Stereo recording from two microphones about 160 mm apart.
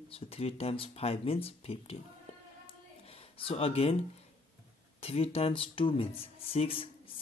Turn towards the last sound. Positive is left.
turn(degrees=35)  # may be behind; listen again after turning